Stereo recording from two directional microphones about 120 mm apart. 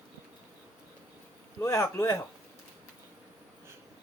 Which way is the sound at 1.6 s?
25° left (ahead or behind).